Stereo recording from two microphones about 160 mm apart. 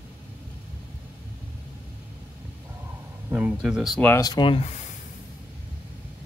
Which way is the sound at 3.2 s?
10° right (ahead or behind).